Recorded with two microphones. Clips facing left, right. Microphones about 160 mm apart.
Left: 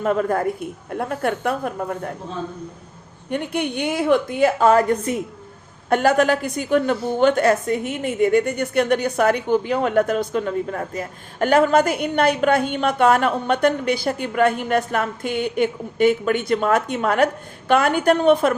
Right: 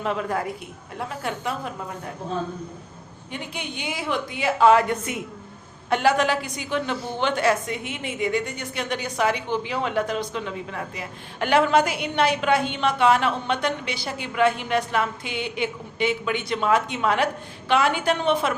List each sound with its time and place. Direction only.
0.0 s a woman's voice: 45° left (ahead or behind)
3.2 s a woman's voice: 55° left (ahead or behind); by 5.2 s 40° left (ahead or behind)
5.9 s a woman's voice: 50° left (ahead or behind)